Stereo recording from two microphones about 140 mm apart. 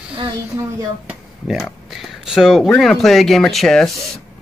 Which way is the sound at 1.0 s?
5° right (ahead or behind).